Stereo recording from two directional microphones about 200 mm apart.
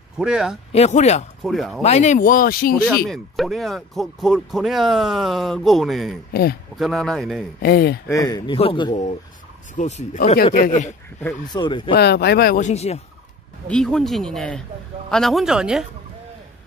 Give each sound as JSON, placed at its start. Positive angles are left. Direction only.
{"t": 0.2, "sound": "speech", "side_deg": -5}
{"t": 0.7, "sound": "speech", "side_deg": 35}
{"t": 1.4, "sound": "speech", "side_deg": 0}
{"t": 1.8, "sound": "speech", "side_deg": 35}
{"t": 3.1, "sound": "speech", "side_deg": 0}
{"t": 7.6, "sound": "speech", "side_deg": 55}
{"t": 8.1, "sound": "speech", "side_deg": 15}
{"t": 9.8, "sound": "speech", "side_deg": 35}
{"t": 11.4, "sound": "speech", "side_deg": 20}
{"t": 11.9, "sound": "speech", "side_deg": 55}
{"t": 12.5, "sound": "speech", "side_deg": 35}
{"t": 13.7, "sound": "speech", "side_deg": 0}